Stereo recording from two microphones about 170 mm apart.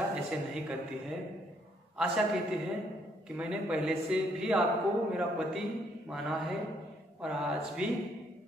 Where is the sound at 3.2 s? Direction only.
5° right (ahead or behind).